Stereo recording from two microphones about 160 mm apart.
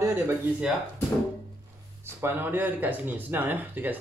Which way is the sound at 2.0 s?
15° right (ahead or behind).